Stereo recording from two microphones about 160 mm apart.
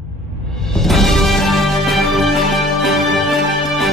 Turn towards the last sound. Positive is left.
turn(degrees=0)  # may be behind; listen again after turning